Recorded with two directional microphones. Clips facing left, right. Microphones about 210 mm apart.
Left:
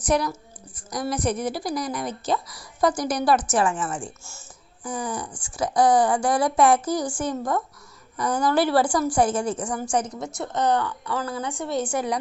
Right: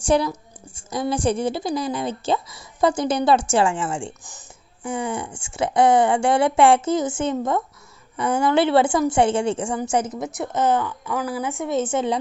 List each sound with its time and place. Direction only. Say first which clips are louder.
0.0 s a woman's voice: right 3 dB; 30° right (ahead or behind)